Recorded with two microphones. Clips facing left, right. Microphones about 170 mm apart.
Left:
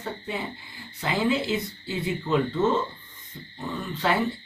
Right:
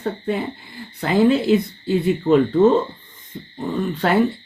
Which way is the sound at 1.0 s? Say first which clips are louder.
Right 8 dB; 55° right (ahead or behind).